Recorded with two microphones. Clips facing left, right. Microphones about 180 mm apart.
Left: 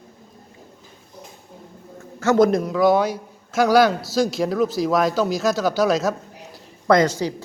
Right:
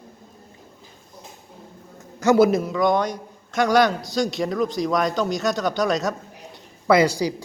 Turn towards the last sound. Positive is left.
turn(degrees=-10)  # may be behind; listen again after turning